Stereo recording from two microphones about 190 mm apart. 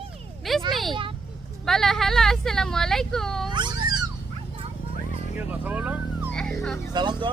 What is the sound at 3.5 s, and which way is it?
Cat, 25° right (ahead or behind).